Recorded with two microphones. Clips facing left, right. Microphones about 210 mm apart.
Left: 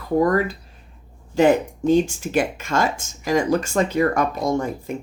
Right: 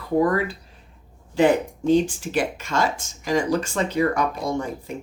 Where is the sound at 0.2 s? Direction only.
40° left (ahead or behind).